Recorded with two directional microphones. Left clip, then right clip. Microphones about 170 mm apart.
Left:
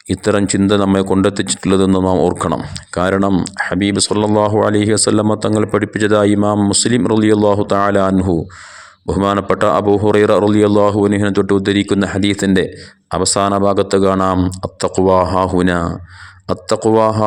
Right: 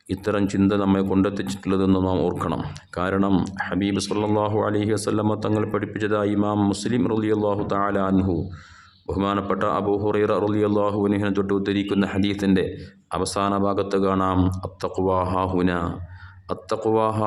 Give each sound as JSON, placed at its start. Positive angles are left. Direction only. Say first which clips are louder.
{"t": 0.1, "sound": "speech", "louder": "left 9 dB", "side_deg": 35}